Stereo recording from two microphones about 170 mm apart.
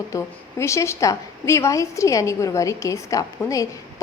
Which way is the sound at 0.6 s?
15° left (ahead or behind).